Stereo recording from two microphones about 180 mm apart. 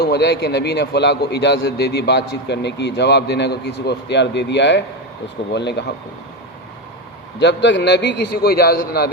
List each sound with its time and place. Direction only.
0.0 s a man's voice: 65° left (ahead or behind)
7.3 s a man's voice: 75° left (ahead or behind); by 9.1 s 60° left (ahead or behind)